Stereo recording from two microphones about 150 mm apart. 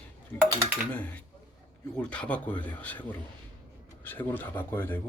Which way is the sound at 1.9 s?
10° left (ahead or behind).